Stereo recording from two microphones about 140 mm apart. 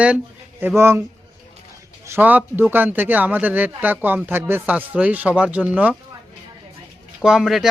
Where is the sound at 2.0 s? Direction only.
15° right (ahead or behind).